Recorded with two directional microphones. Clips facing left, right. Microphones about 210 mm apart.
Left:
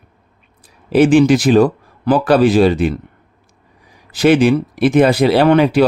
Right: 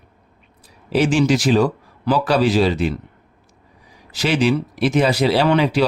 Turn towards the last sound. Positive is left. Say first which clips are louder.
# left 5 dB
turn(degrees=50)  # may be behind; listen again after turning